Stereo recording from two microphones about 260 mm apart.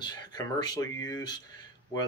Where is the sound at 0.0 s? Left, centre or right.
Centre.